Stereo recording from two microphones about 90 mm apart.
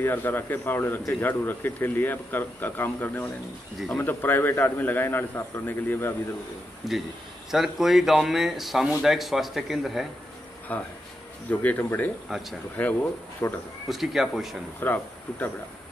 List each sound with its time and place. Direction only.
0.0 s speech: 25° left (ahead or behind)
6.8 s speech: centre (ahead or behind)
10.7 s speech: 20° left (ahead or behind)
12.3 s speech: centre (ahead or behind)
12.8 s speech: 15° left (ahead or behind)
13.4 s speech: 30° left (ahead or behind)
13.8 s speech: centre (ahead or behind)
14.8 s speech: 20° left (ahead or behind)